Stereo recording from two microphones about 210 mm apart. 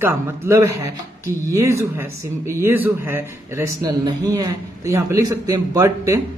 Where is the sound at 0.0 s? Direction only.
10° right (ahead or behind).